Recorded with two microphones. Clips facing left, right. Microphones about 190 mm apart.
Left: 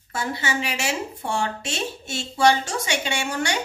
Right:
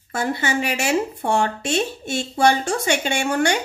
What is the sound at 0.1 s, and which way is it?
Speech, 55° right (ahead or behind).